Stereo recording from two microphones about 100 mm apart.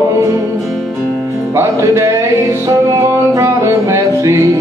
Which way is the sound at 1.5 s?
30° right (ahead or behind).